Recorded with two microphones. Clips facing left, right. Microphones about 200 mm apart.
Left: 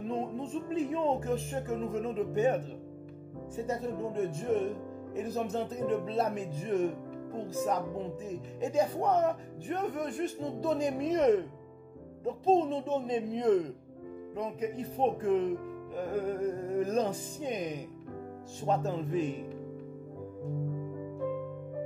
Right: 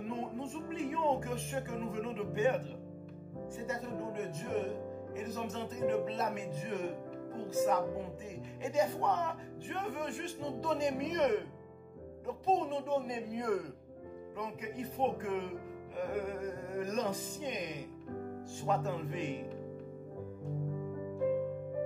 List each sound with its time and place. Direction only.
0.0 s speech: 35° left (ahead or behind)
14.3 s speech: 35° left (ahead or behind)